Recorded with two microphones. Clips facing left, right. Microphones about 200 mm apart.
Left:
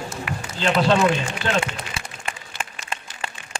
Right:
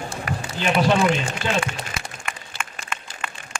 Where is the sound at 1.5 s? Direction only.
30° left (ahead or behind).